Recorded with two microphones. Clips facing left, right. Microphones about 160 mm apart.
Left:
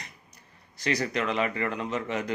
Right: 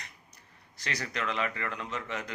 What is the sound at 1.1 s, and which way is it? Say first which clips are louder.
Speech: left 5 dB; 15° left (ahead or behind).